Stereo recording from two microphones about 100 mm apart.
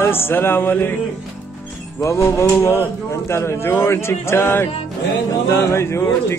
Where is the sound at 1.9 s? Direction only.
30° left (ahead or behind).